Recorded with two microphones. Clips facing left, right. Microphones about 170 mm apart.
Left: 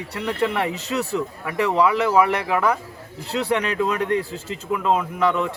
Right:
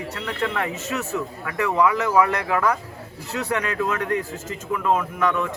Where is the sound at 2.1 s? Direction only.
15° left (ahead or behind).